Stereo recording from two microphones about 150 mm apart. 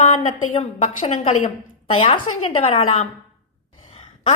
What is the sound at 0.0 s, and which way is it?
A woman's voice, 50° left (ahead or behind).